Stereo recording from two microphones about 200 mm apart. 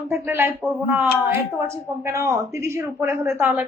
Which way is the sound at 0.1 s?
10° right (ahead or behind).